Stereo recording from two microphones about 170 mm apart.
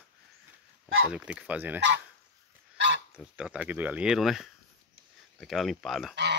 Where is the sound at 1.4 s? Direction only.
10° right (ahead or behind).